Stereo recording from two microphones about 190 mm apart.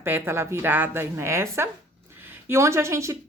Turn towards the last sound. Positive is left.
turn(degrees=-15)  # may be behind; listen again after turning